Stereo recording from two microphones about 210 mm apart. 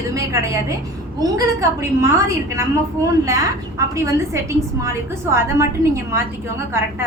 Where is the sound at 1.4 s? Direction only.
15° right (ahead or behind).